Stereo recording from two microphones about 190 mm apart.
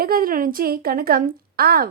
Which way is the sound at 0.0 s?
50° right (ahead or behind).